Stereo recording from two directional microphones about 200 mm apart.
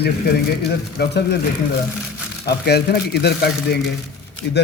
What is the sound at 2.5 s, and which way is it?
Speech, 55° left (ahead or behind).